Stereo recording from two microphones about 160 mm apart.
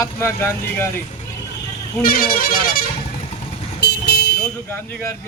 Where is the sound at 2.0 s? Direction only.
60° left (ahead or behind).